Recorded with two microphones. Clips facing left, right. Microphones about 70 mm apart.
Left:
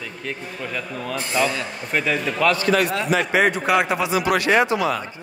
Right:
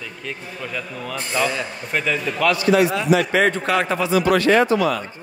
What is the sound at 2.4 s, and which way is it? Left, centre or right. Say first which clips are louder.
Speech: right 2 dB; left.